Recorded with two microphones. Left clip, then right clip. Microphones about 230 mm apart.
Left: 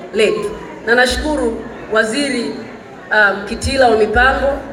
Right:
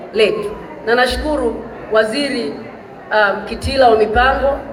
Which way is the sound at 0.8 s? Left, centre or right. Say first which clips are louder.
Left 1 dB; left.